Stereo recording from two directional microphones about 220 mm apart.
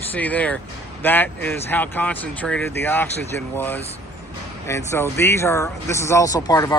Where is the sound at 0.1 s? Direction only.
5° left (ahead or behind).